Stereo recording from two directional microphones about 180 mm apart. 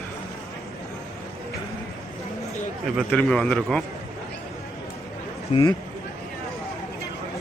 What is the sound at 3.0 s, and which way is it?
Speech, 5° left (ahead or behind).